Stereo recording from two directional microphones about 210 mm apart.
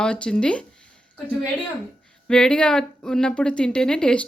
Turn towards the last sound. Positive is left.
turn(degrees=5)  # may be behind; listen again after turning